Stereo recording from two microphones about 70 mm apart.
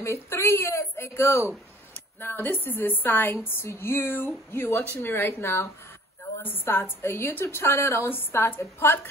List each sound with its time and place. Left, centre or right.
0.0 s a woman's voice: left